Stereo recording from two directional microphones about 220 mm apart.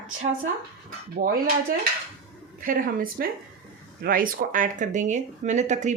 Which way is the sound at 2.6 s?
40° right (ahead or behind).